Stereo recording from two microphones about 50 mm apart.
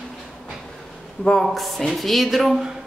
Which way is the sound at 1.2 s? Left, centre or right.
Centre.